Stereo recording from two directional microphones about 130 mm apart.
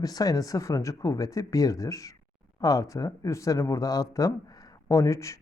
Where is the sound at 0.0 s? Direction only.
30° left (ahead or behind).